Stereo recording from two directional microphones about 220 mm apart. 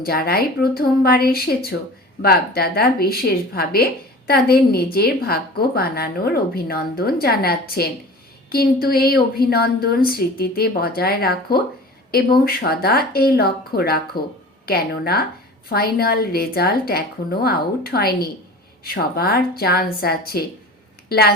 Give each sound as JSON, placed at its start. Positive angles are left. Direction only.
{"t": 0.0, "sound": "a woman's voice", "side_deg": 45}